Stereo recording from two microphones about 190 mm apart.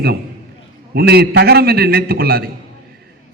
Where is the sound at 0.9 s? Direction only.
55° right (ahead or behind).